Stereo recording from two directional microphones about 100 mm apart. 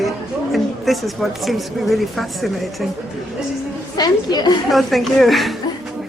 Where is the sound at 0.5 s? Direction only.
Centre (ahead or behind).